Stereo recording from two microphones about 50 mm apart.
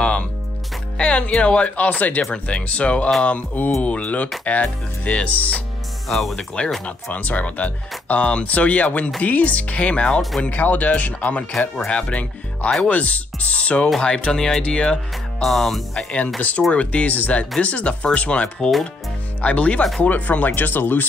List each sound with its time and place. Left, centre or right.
0.0 s music: left
0.9 s speech: left
6.0 s speech: centre
6.3 s speech: centre
7.1 s speech: left
15.4 s speech: centre
16.3 s speech: left